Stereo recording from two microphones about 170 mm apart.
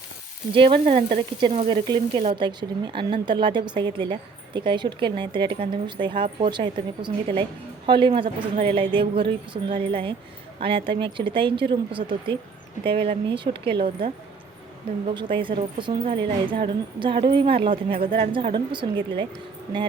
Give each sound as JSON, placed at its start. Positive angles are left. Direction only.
{"t": 0.5, "sound": "a woman's voice", "side_deg": -30}